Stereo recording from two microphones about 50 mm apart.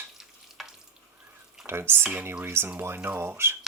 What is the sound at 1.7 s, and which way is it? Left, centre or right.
Speech, right.